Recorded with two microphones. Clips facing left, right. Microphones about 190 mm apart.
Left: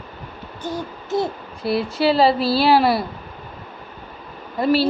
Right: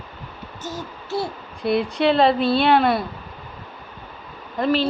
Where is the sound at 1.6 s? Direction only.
5° left (ahead or behind).